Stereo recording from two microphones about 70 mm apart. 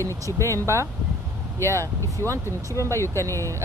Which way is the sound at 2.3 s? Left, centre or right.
Right.